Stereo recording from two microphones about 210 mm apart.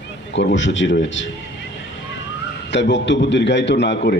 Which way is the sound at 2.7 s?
60° left (ahead or behind).